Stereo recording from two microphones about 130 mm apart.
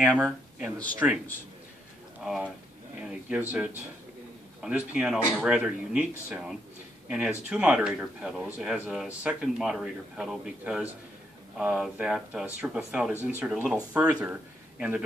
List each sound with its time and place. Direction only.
0.2 s speech: 15° right (ahead or behind)
2.2 s a man's voice: centre (ahead or behind)